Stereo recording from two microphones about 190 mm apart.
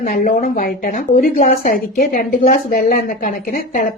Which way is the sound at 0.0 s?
45° left (ahead or behind).